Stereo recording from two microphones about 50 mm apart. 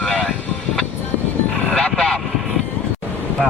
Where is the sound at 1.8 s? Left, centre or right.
Centre.